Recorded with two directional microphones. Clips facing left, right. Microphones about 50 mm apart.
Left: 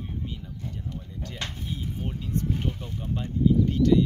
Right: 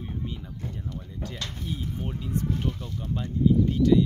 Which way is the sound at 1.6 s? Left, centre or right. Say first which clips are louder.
Right 4 dB; centre.